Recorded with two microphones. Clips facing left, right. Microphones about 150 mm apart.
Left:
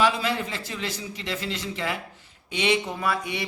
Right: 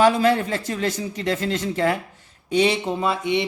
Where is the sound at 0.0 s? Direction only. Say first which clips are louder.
Right 7 dB; 45° right (ahead or behind).